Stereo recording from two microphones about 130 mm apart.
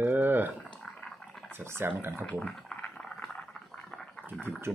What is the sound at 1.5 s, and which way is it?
Speech, 15° right (ahead or behind).